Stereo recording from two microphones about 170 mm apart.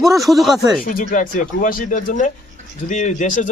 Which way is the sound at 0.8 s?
50° left (ahead or behind).